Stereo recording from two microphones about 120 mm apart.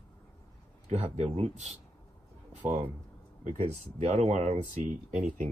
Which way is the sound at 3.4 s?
80° right.